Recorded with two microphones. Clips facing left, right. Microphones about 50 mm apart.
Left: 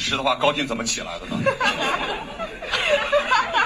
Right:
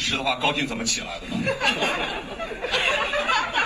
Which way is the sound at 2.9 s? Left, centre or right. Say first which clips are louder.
Left 8 dB; left.